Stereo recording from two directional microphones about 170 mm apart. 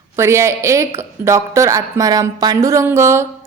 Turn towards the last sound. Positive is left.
turn(degrees=-15)  # may be behind; listen again after turning